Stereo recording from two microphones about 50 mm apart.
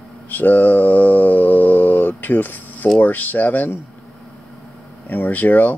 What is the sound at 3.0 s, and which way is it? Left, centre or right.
Speech, left.